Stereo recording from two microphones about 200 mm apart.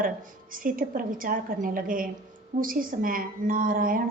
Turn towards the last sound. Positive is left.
turn(degrees=-45)  # may be behind; listen again after turning